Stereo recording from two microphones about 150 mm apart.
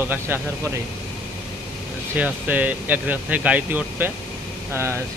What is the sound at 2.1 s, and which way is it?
Speech, 10° right (ahead or behind).